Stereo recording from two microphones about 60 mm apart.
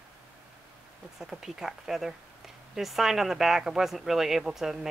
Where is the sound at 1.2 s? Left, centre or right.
Centre.